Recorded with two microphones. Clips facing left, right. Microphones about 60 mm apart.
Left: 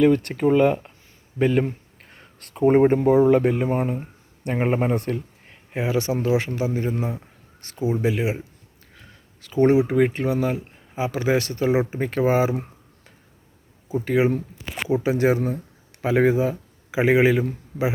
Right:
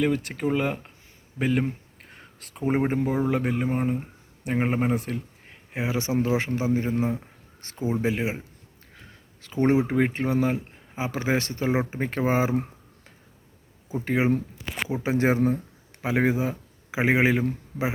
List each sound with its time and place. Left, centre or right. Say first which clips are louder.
0.0 s speech: left 7 dB; centre
5.7 s speech: left 3 dB; centre
7.8 s speech: left 3 dB; centre
8.0 s speech: left 3 dB; right
9.4 s speech: left 4 dB; right
14.0 s speech: left 3 dB; right
16.0 s speech: left 5 dB; centre